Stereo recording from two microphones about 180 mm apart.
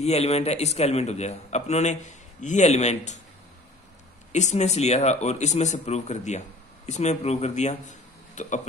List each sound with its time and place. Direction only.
0.0 s a man's voice: 35° left (ahead or behind)
4.3 s a man's voice: 40° left (ahead or behind)